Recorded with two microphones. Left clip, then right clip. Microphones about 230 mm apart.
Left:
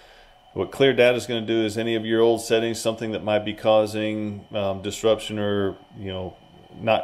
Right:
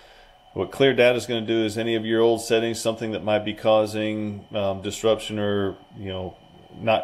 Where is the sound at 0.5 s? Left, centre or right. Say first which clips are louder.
Even; left.